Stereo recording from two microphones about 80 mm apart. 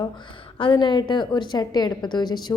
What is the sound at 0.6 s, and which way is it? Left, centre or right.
A woman's voice, left.